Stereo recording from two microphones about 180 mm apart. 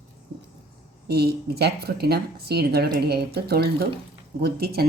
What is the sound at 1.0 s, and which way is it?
A woman's voice, 65° right (ahead or behind).